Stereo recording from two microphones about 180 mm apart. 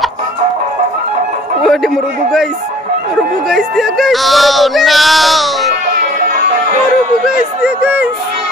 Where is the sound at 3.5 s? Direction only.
Centre (ahead or behind).